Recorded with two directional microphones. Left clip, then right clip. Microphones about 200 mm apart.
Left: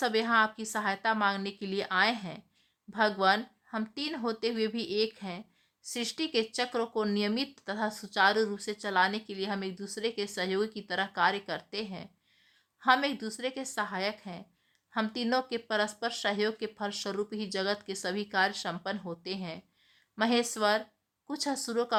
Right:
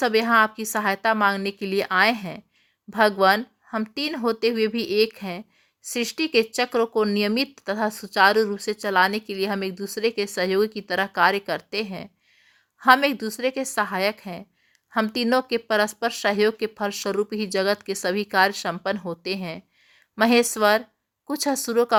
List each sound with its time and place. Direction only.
0.0 s speech: 25° right (ahead or behind)